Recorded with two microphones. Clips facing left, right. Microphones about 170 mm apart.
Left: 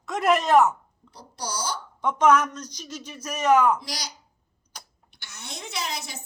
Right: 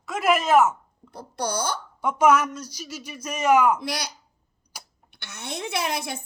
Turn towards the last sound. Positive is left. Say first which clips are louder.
# right 6 dB
turn(degrees=-55)  # may be behind; listen again after turning